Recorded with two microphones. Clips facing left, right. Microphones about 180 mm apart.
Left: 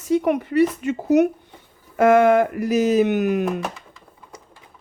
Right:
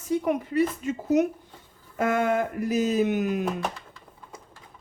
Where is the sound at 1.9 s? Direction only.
80° left.